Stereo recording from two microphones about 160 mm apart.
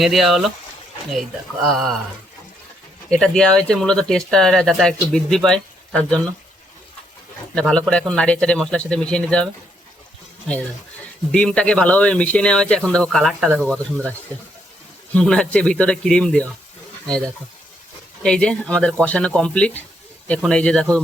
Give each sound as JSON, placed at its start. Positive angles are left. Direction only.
{"t": 0.0, "sound": "speech", "side_deg": 0}
{"t": 3.1, "sound": "speech", "side_deg": 5}
{"t": 7.5, "sound": "speech", "side_deg": 5}
{"t": 11.3, "sound": "speech", "side_deg": 5}